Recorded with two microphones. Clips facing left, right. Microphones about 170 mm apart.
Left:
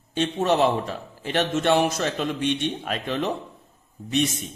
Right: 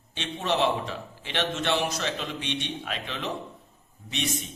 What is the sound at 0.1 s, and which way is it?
A man's voice, 45° left (ahead or behind).